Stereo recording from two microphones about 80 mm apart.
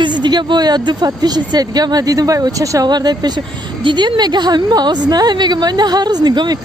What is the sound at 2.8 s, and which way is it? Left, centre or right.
Speech, right.